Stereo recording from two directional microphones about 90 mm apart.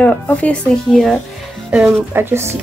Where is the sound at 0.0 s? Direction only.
15° left (ahead or behind).